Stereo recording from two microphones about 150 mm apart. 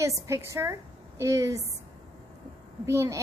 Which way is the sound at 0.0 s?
20° right (ahead or behind).